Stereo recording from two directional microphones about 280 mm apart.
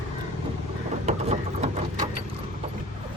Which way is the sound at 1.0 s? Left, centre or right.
Right.